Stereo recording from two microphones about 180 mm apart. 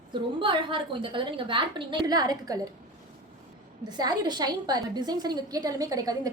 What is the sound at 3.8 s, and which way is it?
A woman's voice, 25° right (ahead or behind).